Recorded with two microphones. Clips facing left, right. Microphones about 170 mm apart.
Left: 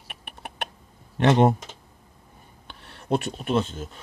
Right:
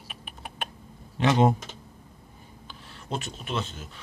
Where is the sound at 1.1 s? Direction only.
60° left (ahead or behind).